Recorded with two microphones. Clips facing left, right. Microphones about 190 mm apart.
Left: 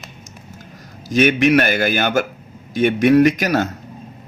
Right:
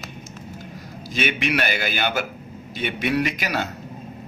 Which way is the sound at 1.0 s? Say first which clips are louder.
Left 10 dB; 45° left (ahead or behind).